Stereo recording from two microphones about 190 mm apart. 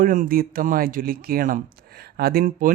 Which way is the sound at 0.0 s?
45° right (ahead or behind).